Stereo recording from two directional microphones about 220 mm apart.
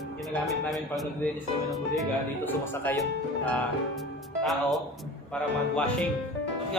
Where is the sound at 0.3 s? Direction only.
Centre (ahead or behind).